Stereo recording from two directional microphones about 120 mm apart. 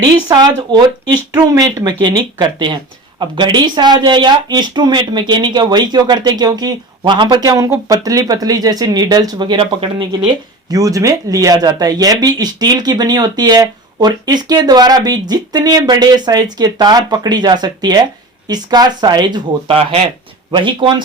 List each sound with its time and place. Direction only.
0.0 s speech: 35° right (ahead or behind)
10.7 s speech: 30° right (ahead or behind)